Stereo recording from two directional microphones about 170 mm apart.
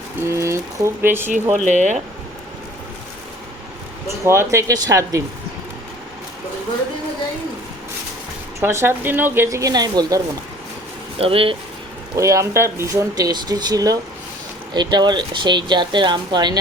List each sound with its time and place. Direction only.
0.2 s speech: 15° right (ahead or behind)
1.5 s speech: 45° right (ahead or behind)
4.2 s speech: 15° right (ahead or behind)
8.6 s speech: 15° right (ahead or behind)
11.2 s speech: 35° right (ahead or behind)
12.1 s speech: 20° right (ahead or behind)